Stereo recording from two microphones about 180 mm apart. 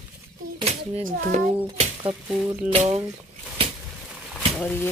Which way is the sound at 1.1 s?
40° right (ahead or behind).